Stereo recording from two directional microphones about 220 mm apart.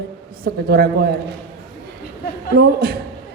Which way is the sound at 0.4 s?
45° right (ahead or behind).